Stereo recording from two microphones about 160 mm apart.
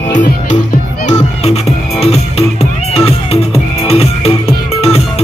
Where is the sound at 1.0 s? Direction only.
45° left (ahead or behind).